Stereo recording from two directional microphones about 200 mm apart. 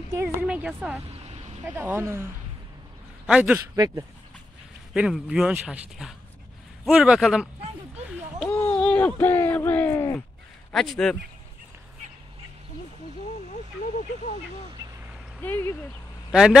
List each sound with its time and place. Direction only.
0.1 s a woman's voice: 10° right (ahead or behind)
3.3 s speech: 5° right (ahead or behind)
3.7 s speech: 20° right (ahead or behind)
4.9 s speech: 5° right (ahead or behind)
8.7 s speech: 5° left (ahead or behind)
13.5 s speech: 35° left (ahead or behind)
15.4 s speech: 10° left (ahead or behind)
16.3 s a man's voice: 5° right (ahead or behind)